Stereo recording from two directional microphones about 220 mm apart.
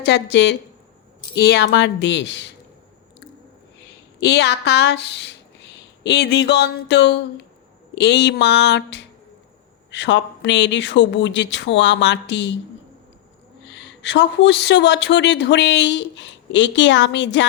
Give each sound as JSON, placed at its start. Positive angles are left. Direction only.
{"t": 0.0, "sound": "speech", "side_deg": 50}
{"t": 3.8, "sound": "speech", "side_deg": 50}
{"t": 13.7, "sound": "speech", "side_deg": 55}